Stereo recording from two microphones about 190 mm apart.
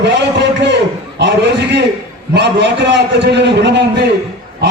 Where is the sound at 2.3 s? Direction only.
65° right (ahead or behind).